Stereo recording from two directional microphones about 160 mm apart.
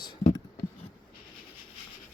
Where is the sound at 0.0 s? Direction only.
25° left (ahead or behind).